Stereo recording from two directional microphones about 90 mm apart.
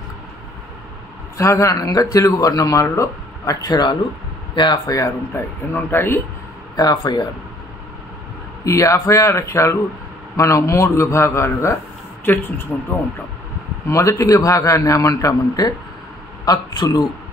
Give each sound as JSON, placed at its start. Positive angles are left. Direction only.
{"t": 1.4, "sound": "speech", "side_deg": 35}
{"t": 6.8, "sound": "a man's voice", "side_deg": 45}
{"t": 8.6, "sound": "speech", "side_deg": 35}
{"t": 13.8, "sound": "speech", "side_deg": 35}
{"t": 16.4, "sound": "a man's voice", "side_deg": 50}